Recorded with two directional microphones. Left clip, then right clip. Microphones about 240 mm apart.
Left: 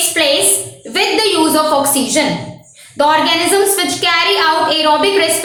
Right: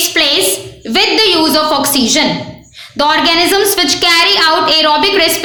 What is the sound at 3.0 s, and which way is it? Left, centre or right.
Speech, right.